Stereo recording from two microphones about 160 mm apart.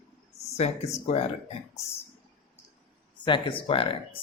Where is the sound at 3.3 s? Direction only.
30° left (ahead or behind).